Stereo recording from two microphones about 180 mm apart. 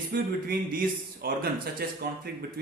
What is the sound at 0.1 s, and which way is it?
A man's voice, 55° right (ahead or behind).